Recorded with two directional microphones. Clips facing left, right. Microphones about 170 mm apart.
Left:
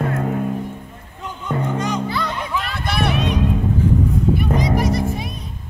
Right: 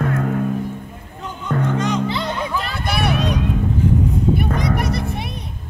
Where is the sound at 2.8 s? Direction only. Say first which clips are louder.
Even; 10° right (ahead or behind).